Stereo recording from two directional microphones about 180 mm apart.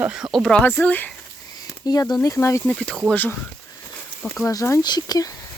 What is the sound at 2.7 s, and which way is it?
Speech, 5° left (ahead or behind).